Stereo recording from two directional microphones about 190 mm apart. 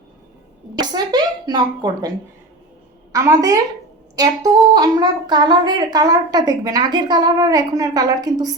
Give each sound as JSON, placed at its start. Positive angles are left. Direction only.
{"t": 0.8, "sound": "a woman's voice", "side_deg": -20}
{"t": 3.1, "sound": "a woman's voice", "side_deg": -20}